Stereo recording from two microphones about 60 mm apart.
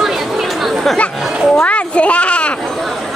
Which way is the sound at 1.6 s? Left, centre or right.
Left.